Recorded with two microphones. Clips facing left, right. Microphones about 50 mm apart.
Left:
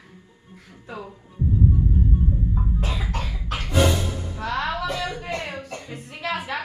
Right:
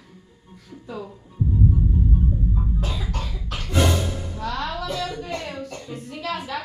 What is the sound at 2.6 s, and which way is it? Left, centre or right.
Cough, left.